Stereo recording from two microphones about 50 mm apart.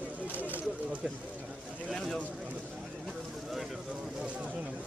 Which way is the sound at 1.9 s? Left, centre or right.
Centre.